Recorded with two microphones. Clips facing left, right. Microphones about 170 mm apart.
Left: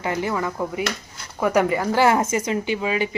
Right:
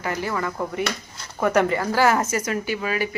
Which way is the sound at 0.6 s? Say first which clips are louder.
Left 1 dB; 5° left (ahead or behind).